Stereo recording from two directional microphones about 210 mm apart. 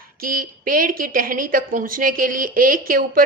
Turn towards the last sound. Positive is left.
turn(degrees=-40)  # may be behind; listen again after turning